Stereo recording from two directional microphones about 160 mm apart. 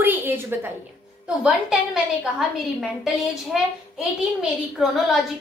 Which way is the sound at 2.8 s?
Centre (ahead or behind).